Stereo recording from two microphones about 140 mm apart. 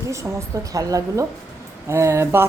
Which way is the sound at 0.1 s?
20° right (ahead or behind).